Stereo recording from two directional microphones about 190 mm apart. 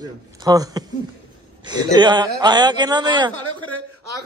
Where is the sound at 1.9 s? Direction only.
20° right (ahead or behind).